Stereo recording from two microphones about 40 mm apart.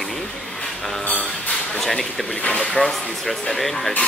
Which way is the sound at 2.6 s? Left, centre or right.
Centre.